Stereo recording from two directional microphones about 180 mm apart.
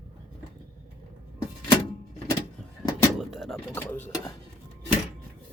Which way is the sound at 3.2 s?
Centre (ahead or behind).